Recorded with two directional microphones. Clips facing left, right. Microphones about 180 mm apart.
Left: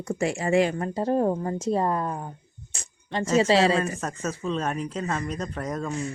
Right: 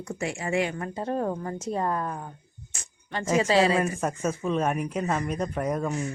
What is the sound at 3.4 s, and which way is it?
Speech, 35° left (ahead or behind).